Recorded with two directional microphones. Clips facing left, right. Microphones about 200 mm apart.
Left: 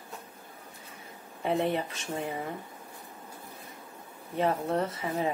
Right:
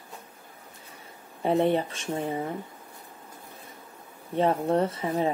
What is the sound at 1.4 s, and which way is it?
Speech, 30° right (ahead or behind).